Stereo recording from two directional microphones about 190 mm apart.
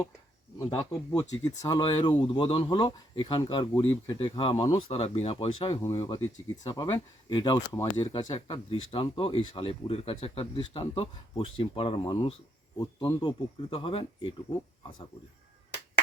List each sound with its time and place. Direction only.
0.6 s speech: 20° left (ahead or behind)